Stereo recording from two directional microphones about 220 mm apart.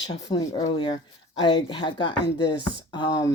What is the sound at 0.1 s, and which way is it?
Speech, 20° left (ahead or behind).